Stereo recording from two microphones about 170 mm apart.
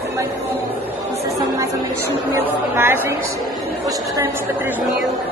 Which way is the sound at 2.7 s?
10° right (ahead or behind).